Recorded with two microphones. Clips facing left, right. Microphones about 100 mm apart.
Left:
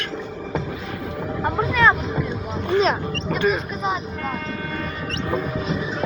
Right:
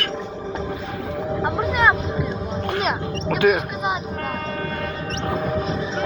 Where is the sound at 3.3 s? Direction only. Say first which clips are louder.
Right 4 dB; 65° right (ahead or behind).